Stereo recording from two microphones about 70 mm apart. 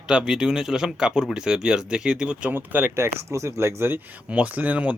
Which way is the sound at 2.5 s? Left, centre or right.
Right.